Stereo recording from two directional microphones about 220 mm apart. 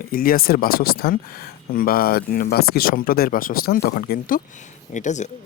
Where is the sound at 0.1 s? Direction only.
40° left (ahead or behind).